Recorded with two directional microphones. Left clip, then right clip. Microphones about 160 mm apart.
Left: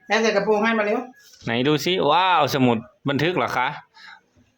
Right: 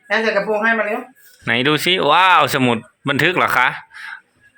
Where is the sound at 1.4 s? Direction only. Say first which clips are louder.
Right 5 dB; 5° left (ahead or behind).